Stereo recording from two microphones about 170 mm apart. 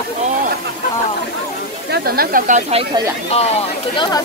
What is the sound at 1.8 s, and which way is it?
Speech, 65° right (ahead or behind).